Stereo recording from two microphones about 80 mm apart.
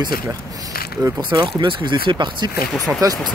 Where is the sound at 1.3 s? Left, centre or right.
Right.